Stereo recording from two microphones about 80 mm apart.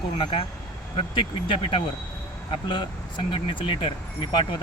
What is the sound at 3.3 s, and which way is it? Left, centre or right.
Speech, left.